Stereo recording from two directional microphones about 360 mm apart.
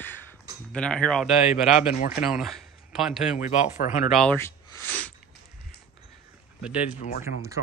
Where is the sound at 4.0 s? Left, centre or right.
Centre.